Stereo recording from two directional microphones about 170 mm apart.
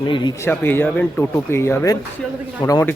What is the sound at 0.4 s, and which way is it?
Speech, 10° left (ahead or behind).